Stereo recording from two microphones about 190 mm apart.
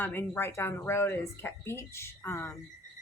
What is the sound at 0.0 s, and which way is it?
Speech, 10° left (ahead or behind).